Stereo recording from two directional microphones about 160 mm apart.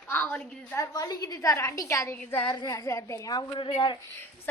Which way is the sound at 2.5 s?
25° left (ahead or behind).